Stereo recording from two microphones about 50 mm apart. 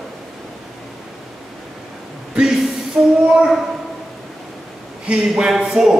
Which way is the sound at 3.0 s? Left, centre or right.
Centre.